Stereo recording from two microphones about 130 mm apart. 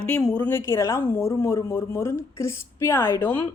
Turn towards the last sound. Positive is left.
turn(degrees=15)  # may be behind; listen again after turning